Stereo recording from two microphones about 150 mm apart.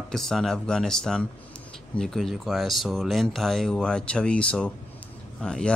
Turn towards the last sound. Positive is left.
turn(degrees=5)  # may be behind; listen again after turning